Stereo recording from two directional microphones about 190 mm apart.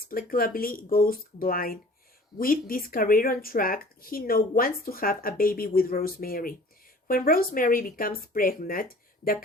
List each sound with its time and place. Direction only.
0.1 s speech: 50° left (ahead or behind)